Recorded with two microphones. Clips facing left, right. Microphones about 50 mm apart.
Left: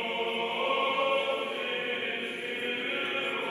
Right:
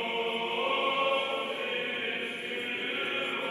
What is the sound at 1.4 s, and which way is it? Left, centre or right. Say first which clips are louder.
Chant: even; left.